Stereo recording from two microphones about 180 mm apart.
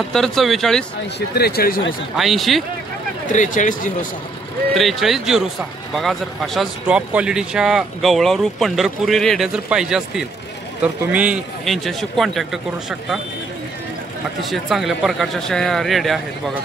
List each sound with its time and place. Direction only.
0.1 s speech: centre (ahead or behind)
1.3 s speech: 60° left (ahead or behind)
2.1 s speech: centre (ahead or behind)
3.3 s speech: 45° left (ahead or behind)
4.7 s speech: centre (ahead or behind)
14.5 s speech: centre (ahead or behind)